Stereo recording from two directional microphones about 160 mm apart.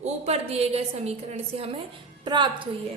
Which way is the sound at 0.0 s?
40° right (ahead or behind).